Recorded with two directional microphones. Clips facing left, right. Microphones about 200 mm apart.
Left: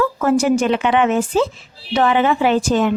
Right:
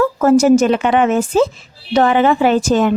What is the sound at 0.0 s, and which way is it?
A woman's voice, 40° right (ahead or behind).